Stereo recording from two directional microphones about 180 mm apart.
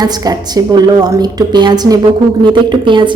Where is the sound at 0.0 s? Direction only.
20° right (ahead or behind).